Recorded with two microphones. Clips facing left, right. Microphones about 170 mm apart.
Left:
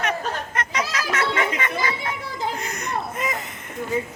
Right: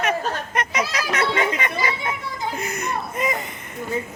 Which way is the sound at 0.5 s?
15° right (ahead or behind).